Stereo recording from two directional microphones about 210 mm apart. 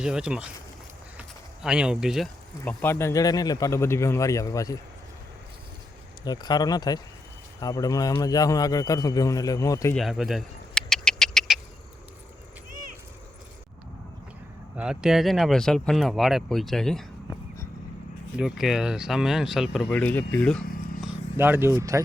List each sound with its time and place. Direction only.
0.0 s speech: 5° right (ahead or behind)
1.6 s speech: 5° right (ahead or behind); by 4.8 s 15° left (ahead or behind)
6.2 s speech: 20° left (ahead or behind)
9.9 s a sound: centre (ahead or behind)
14.8 s speech: 5° right (ahead or behind)
18.3 s speech: centre (ahead or behind)
20.0 s speech: 10° left (ahead or behind)
21.0 s speech: 10° right (ahead or behind)